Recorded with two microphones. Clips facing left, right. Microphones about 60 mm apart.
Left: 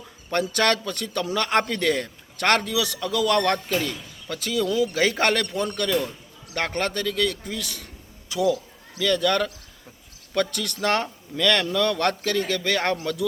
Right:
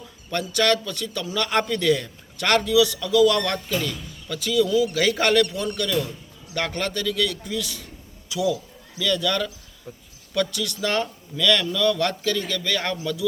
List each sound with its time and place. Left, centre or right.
0.3 s a man's voice: left